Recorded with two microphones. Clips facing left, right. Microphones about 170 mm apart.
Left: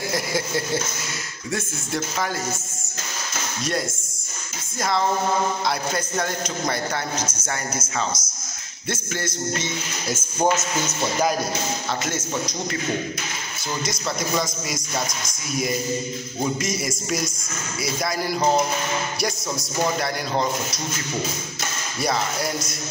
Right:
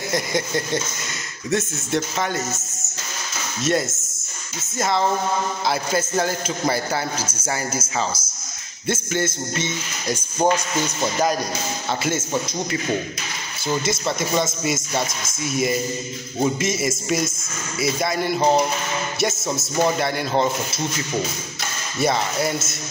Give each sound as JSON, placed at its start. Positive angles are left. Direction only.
{"t": 0.1, "sound": "a man's voice", "side_deg": 5}
{"t": 4.7, "sound": "a man's voice", "side_deg": 0}
{"t": 10.4, "sound": "speech", "side_deg": -10}
{"t": 13.7, "sound": "a man's voice", "side_deg": -25}
{"t": 15.5, "sound": "a man's voice", "side_deg": 0}
{"t": 19.5, "sound": "a man's voice", "side_deg": -25}